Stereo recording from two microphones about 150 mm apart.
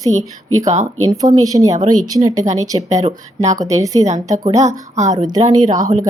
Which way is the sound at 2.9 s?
50° right (ahead or behind).